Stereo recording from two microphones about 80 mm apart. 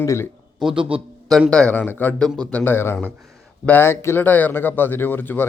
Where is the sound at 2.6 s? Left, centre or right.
Left.